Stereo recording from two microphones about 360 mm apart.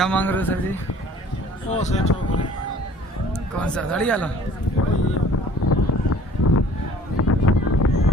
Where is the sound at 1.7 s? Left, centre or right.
Centre.